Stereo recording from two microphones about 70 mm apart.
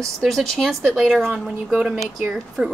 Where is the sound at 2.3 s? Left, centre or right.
Centre.